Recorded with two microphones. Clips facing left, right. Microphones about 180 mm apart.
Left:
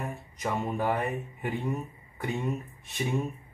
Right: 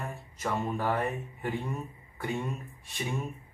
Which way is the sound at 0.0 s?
15° left (ahead or behind).